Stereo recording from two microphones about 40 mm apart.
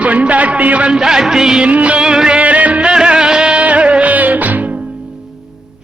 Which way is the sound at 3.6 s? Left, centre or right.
Right.